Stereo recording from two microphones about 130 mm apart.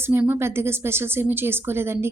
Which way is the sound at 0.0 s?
15° right (ahead or behind).